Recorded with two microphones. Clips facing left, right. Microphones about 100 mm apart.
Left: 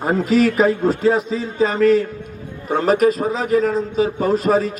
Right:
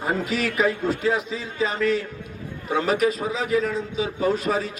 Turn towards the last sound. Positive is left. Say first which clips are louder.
# left 6 dB
turn(degrees=45)  # may be behind; listen again after turning